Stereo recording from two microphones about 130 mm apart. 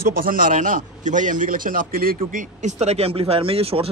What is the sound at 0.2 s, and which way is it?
A man's voice, 90° right.